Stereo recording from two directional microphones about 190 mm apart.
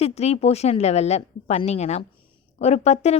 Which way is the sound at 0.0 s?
35° left (ahead or behind).